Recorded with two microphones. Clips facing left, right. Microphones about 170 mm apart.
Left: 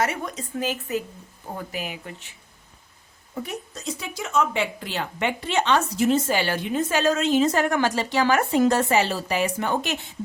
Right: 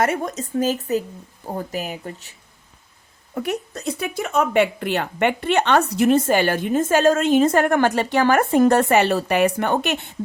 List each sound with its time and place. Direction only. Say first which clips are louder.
0.0 s a woman's voice: right 5 dB; 45° right (ahead or behind)
3.3 s speech: right 7 dB; 65° right (ahead or behind)